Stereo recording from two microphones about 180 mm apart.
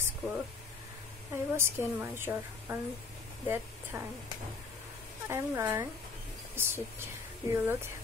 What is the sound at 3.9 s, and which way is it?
Speech, 15° right (ahead or behind).